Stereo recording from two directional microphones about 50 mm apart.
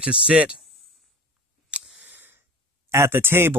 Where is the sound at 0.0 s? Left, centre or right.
Right.